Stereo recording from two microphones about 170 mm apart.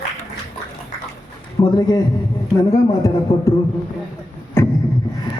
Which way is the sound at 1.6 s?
25° left (ahead or behind).